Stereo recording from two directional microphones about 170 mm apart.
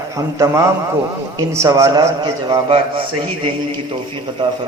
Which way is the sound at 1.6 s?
15° right (ahead or behind).